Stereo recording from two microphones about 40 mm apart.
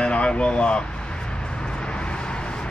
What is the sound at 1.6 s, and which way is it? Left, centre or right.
Vehicle, left.